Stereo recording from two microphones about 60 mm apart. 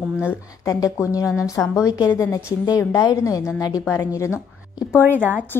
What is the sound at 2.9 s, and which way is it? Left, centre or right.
Speech, left.